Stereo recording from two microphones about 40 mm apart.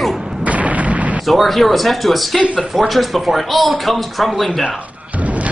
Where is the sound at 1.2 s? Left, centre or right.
Centre.